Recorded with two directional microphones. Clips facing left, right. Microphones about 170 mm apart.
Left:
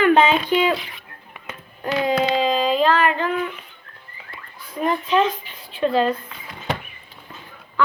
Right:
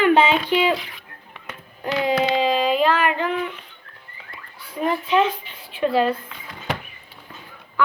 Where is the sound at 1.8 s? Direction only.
15° right (ahead or behind).